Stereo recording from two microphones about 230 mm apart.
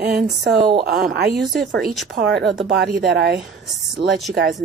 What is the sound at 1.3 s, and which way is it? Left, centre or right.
Speech, centre.